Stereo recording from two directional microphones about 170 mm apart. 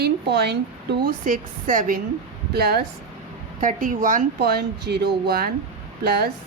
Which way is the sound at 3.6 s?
50° right (ahead or behind).